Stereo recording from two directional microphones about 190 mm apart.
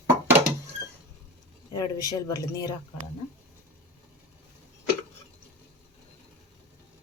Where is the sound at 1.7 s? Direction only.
20° left (ahead or behind).